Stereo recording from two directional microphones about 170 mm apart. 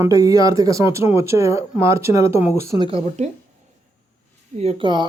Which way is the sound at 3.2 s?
40° right (ahead or behind).